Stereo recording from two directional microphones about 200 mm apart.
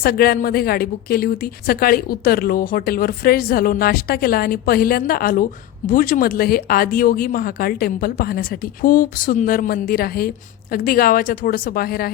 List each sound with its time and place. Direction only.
0.0 s a woman's voice: 50° left (ahead or behind)